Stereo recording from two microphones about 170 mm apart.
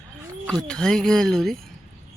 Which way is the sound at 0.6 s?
5° left (ahead or behind).